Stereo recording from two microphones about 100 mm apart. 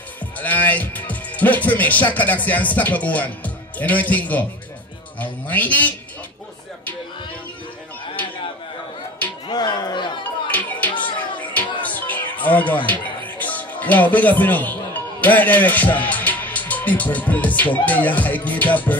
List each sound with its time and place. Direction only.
0.4 s a man's voice: 15° left (ahead or behind)
9.5 s music: 45° left (ahead or behind)
10.5 s music: 15° left (ahead or behind)
11.8 s speech: 15° left (ahead or behind)